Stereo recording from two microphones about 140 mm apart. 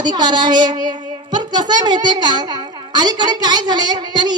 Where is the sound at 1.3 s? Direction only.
30° right (ahead or behind).